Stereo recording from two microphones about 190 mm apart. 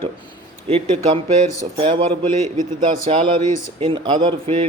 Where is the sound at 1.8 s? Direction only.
30° right (ahead or behind).